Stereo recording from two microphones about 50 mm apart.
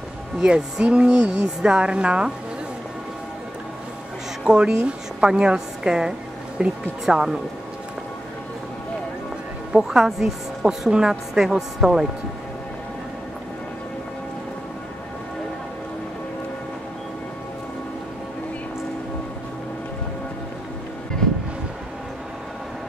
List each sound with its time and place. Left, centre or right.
0.4 s speech: centre
4.5 s a woman's voice: centre
9.7 s a woman's voice: centre